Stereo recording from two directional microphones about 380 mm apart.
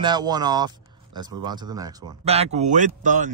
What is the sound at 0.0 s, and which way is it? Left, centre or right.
Speech, centre.